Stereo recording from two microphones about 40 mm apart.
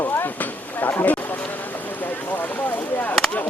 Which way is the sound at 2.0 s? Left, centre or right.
Left.